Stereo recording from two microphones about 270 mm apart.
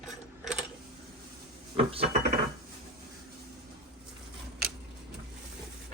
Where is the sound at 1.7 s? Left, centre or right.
Right.